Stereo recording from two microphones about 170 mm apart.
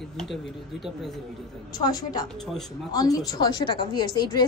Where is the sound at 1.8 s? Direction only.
25° left (ahead or behind).